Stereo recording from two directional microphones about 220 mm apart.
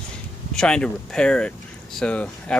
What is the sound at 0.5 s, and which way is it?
Speech, 5° left (ahead or behind).